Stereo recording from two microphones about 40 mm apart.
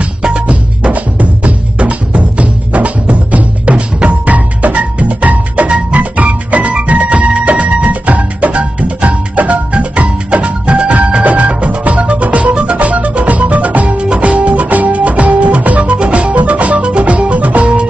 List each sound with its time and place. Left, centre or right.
0.3 s music: right
0.9 s music: right